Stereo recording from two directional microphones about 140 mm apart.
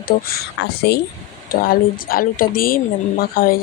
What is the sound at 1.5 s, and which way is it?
A woman's voice, 90° left.